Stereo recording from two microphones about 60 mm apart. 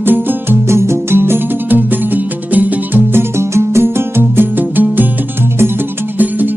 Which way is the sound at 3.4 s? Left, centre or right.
Right.